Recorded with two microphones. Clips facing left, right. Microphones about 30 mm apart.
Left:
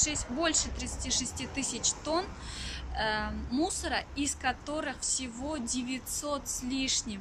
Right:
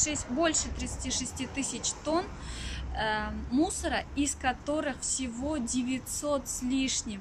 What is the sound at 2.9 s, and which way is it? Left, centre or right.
Speech, left.